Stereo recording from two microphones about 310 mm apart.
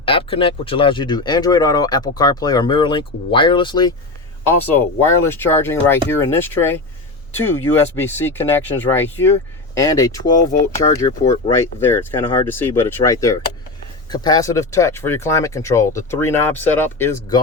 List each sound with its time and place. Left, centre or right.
0.0 s speech: centre